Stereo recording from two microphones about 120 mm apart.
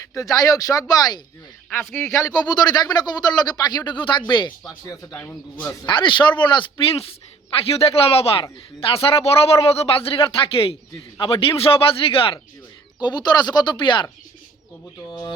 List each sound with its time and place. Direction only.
0.1 s speech: 25° left (ahead or behind)
1.7 s speech: 20° left (ahead or behind)
2.1 s speech: 30° left (ahead or behind)
5.1 s a man's voice: 15° left (ahead or behind)
5.5 s a man's voice: 35° left (ahead or behind)
13.0 s speech: 40° left (ahead or behind)